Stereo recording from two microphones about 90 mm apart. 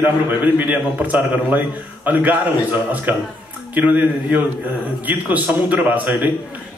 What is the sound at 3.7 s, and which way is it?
A man's voice, 15° right (ahead or behind).